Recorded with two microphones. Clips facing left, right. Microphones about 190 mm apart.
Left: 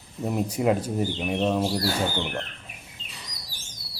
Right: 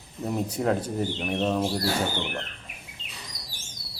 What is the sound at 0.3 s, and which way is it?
Speech, 10° left (ahead or behind).